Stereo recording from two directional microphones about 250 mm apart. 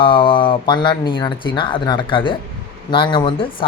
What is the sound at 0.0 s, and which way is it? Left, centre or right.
Speech, centre.